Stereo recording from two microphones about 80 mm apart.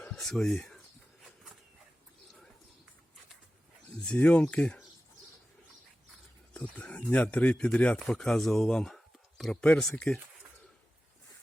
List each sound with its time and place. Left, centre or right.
0.1 s speech: centre
4.0 s speech: centre
6.5 s speech: centre
7.9 s speech: centre